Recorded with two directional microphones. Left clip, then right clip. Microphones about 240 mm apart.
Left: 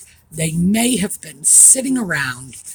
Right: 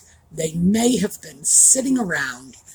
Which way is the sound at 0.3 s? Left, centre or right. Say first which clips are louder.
Left 2 dB; left.